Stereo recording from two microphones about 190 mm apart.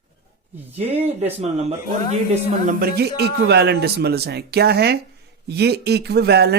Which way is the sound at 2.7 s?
55° right (ahead or behind).